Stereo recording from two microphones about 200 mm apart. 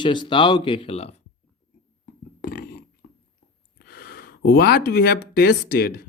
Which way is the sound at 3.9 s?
50° left (ahead or behind).